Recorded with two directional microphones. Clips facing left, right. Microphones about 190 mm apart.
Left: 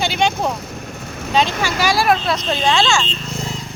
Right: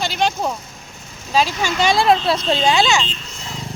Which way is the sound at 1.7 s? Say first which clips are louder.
Right 2 dB; 25° right (ahead or behind).